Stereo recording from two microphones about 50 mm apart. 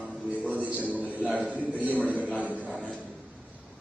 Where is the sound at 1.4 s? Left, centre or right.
Right.